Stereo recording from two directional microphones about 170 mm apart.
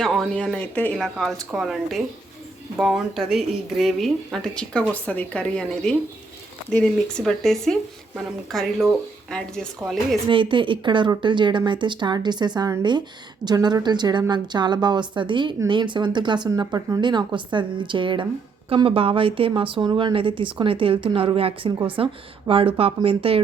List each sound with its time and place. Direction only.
0.0 s speech: centre (ahead or behind)
10.2 s a woman's voice: 30° right (ahead or behind)